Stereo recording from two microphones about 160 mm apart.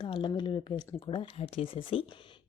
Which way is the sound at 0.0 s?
30° left (ahead or behind).